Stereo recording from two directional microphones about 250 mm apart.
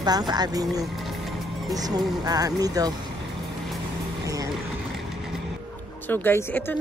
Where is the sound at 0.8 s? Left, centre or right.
Centre.